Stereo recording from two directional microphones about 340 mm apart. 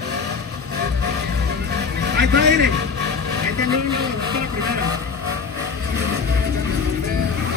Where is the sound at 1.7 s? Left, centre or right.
Right.